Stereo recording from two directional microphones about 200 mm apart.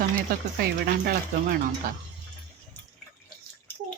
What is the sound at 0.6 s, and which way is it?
Speech, 50° right (ahead or behind).